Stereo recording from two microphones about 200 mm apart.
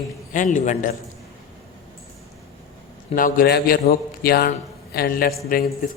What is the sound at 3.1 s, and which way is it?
A man's voice, 45° left (ahead or behind).